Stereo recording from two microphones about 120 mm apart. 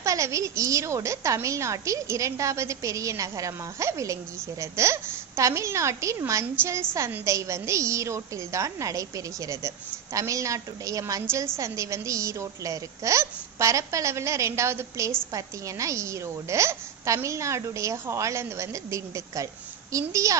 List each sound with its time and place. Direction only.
0.0 s a woman's voice: 25° right (ahead or behind)